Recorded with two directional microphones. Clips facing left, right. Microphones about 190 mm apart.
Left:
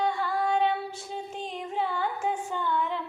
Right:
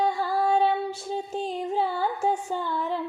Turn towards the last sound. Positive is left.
turn(degrees=-35)  # may be behind; listen again after turning